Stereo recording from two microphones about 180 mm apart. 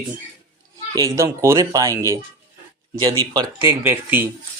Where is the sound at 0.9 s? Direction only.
15° right (ahead or behind).